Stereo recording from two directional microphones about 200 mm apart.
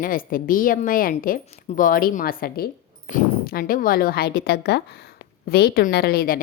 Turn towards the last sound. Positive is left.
turn(degrees=50)  # may be behind; listen again after turning